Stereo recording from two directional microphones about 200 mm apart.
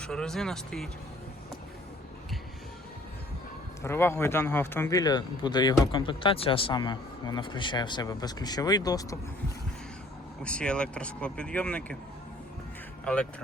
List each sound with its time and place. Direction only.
0.0 s speech: 5° left (ahead or behind)
3.8 s speech: 10° left (ahead or behind)
10.4 s speech: 5° left (ahead or behind)